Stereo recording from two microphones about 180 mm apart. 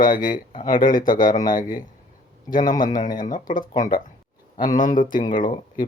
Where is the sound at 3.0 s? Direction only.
45° left (ahead or behind).